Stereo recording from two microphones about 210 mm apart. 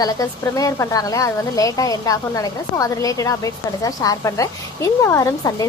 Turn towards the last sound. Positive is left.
turn(degrees=15)  # may be behind; listen again after turning